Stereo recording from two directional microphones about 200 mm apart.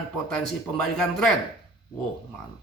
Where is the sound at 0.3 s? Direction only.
5° left (ahead or behind).